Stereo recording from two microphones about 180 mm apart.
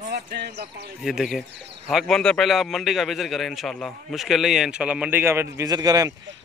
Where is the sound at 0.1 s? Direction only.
70° right (ahead or behind).